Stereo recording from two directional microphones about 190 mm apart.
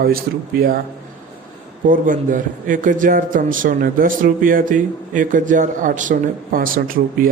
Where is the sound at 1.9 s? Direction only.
45° right (ahead or behind).